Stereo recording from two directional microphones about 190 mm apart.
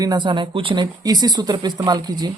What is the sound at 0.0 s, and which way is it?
Speech, 25° right (ahead or behind).